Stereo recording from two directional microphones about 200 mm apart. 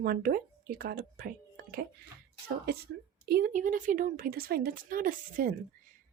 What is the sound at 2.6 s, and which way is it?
A woman's voice, 50° right (ahead or behind).